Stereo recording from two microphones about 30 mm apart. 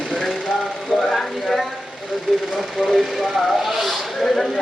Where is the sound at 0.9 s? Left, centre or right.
Centre.